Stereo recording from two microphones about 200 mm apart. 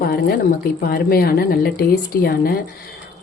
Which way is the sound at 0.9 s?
50° left (ahead or behind).